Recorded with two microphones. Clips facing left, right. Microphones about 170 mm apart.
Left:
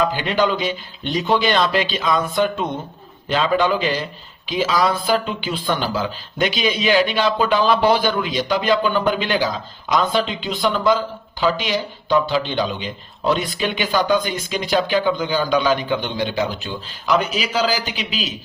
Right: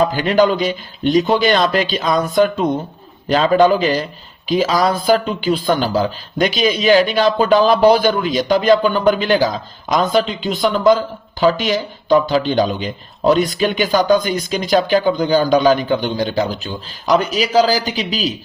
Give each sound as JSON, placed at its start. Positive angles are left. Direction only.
{"t": 0.0, "sound": "speech", "side_deg": -40}